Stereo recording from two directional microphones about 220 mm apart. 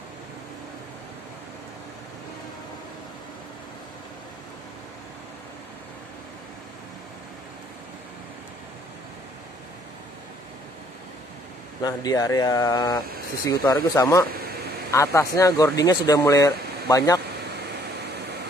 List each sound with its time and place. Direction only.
11.8 s speech: 15° left (ahead or behind)